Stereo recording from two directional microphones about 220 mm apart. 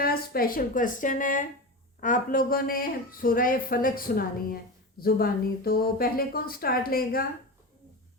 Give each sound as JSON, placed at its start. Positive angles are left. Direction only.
{"t": 0.0, "sound": "speech", "side_deg": 40}